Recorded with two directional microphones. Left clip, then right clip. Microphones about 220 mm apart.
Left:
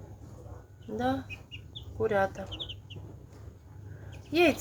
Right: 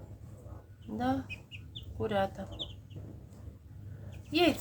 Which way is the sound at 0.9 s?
10° left (ahead or behind).